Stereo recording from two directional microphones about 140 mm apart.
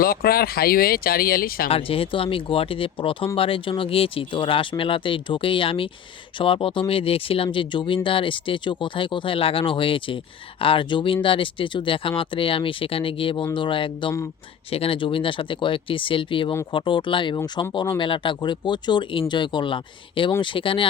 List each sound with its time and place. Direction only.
0.0 s speech: 90° left
1.7 s speech: 40° left (ahead or behind)